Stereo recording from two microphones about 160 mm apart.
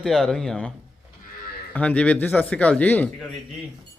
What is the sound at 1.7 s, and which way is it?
A man's voice, 10° left (ahead or behind).